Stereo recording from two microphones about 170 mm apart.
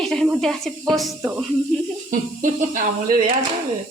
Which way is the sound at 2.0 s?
50° right (ahead or behind).